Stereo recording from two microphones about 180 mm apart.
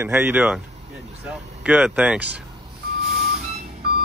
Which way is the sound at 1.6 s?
5° right (ahead or behind).